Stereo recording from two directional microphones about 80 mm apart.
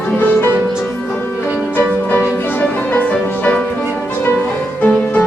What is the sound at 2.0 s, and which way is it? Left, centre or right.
Music, left.